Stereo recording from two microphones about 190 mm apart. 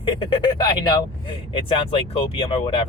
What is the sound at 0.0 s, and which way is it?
Speech, 25° left (ahead or behind).